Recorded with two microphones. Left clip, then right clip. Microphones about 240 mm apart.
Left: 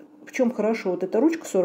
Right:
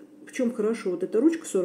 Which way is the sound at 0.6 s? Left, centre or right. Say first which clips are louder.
Left 3 dB; centre.